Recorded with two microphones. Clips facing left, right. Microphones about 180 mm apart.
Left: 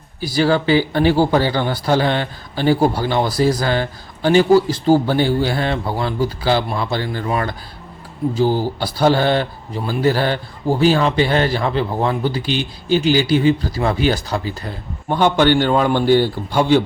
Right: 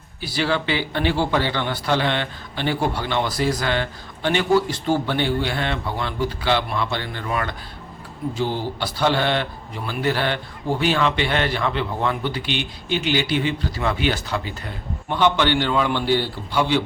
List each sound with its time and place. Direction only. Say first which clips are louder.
0.2 s a man's voice: left 7 dB; 40° left (ahead or behind)